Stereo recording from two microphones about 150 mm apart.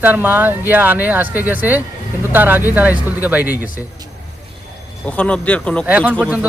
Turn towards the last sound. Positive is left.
turn(degrees=-10)  # may be behind; listen again after turning